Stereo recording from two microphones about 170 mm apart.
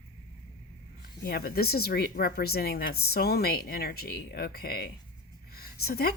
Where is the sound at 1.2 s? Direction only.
65° left (ahead or behind).